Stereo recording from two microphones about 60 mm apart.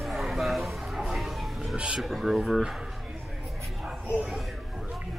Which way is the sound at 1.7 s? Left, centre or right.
Centre.